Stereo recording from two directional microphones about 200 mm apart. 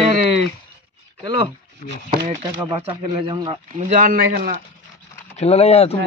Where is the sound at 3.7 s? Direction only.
40° right (ahead or behind).